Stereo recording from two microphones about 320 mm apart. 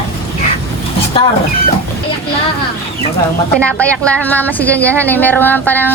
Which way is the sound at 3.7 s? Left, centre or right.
Centre.